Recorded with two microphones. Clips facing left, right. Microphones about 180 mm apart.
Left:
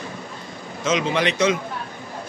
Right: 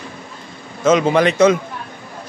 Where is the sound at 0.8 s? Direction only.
50° right (ahead or behind).